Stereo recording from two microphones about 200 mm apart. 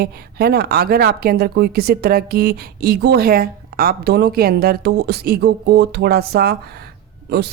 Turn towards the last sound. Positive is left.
turn(degrees=-55)  # may be behind; listen again after turning